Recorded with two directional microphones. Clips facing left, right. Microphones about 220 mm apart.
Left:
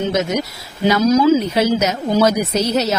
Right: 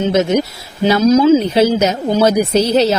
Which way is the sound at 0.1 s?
30° right (ahead or behind).